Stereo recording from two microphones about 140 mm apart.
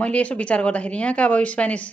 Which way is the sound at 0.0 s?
10° left (ahead or behind).